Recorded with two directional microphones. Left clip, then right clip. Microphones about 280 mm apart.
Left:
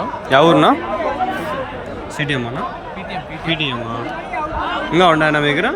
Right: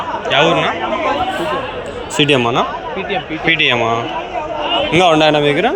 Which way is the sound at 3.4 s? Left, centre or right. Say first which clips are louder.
Right 7 dB; centre.